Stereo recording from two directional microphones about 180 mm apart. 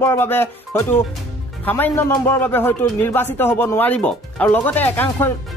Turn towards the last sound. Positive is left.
turn(degrees=10)  # may be behind; listen again after turning